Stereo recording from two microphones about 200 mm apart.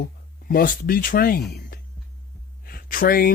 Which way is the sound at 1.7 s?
45° left (ahead or behind).